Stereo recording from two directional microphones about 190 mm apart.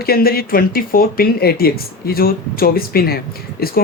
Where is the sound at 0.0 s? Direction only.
50° left (ahead or behind).